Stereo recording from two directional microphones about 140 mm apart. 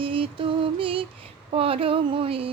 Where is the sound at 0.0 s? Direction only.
40° right (ahead or behind).